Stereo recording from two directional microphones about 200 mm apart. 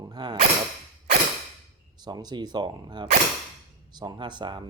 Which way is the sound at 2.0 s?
20° right (ahead or behind).